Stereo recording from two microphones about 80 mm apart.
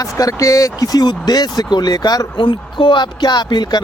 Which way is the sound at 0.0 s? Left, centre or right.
Left.